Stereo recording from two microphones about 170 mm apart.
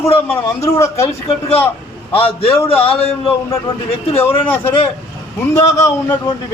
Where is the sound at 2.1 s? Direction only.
35° left (ahead or behind).